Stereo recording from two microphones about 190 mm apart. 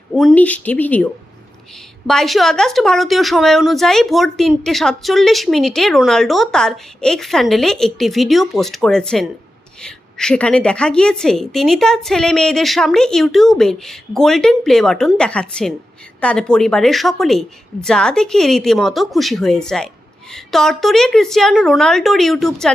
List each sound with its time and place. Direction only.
0.1 s a woman's voice: centre (ahead or behind)
2.0 s a woman's voice: centre (ahead or behind)